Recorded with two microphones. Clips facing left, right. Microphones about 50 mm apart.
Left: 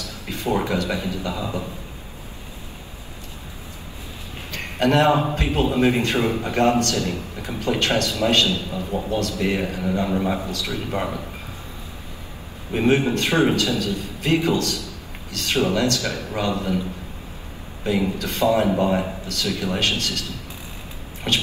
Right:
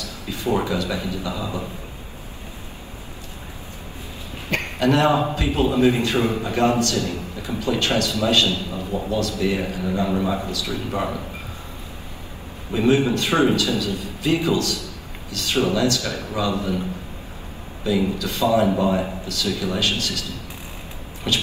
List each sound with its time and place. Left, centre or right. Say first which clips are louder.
0.3 s a man's voice: even; left
4.7 s a man's voice: left 1 dB; left
12.7 s a man's voice: right 1 dB; left
17.8 s a man's voice: right 1 dB; left